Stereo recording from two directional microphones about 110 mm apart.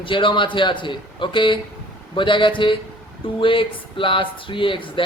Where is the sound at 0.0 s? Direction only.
50° left (ahead or behind).